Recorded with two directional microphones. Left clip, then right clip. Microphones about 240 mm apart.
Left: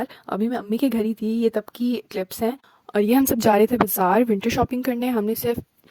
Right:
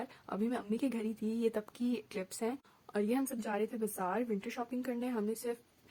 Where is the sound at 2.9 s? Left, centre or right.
Left.